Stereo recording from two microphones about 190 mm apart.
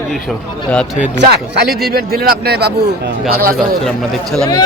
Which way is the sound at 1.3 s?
60° right (ahead or behind).